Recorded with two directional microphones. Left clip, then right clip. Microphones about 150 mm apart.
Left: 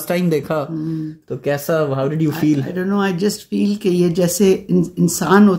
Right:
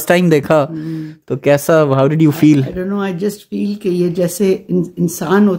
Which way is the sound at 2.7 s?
20° right (ahead or behind).